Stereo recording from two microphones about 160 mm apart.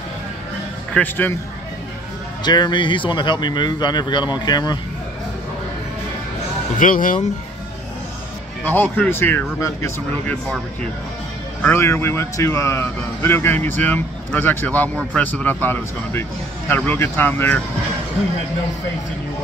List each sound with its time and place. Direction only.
0.9 s speech: 10° left (ahead or behind)
2.4 s speech: 25° left (ahead or behind)
6.8 s speech: 55° left (ahead or behind)
8.6 s speech: 10° left (ahead or behind)
10.3 s speech: 5° left (ahead or behind)
11.6 s speech: 15° left (ahead or behind)